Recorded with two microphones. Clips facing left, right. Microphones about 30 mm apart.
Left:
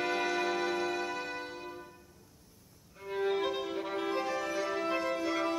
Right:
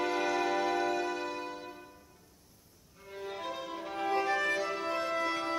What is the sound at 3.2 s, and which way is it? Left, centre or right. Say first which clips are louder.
Violin: left 8 dB; left.